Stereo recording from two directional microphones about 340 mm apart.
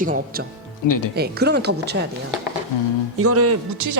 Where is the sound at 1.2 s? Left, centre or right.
Right.